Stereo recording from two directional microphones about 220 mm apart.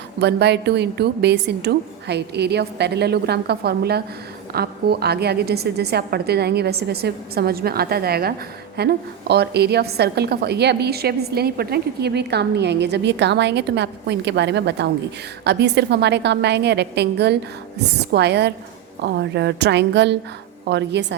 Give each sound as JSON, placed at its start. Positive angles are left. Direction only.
{"t": 0.2, "sound": "a woman's voice", "side_deg": -50}